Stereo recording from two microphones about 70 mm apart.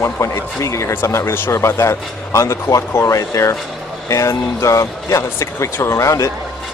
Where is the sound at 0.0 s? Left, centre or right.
Left.